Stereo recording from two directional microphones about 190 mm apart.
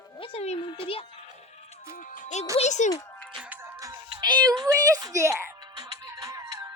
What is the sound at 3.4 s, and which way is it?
Music, 10° right (ahead or behind).